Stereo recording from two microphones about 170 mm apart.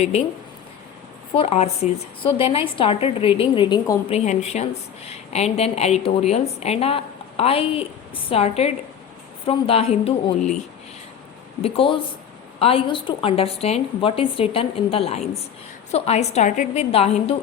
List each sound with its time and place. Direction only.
1.4 s a woman's voice: 35° left (ahead or behind)
4.3 s a woman's voice: 40° left (ahead or behind)
11.6 s a woman's voice: 30° left (ahead or behind); by 16.8 s 45° left (ahead or behind)
16.9 s a woman's voice: 35° left (ahead or behind)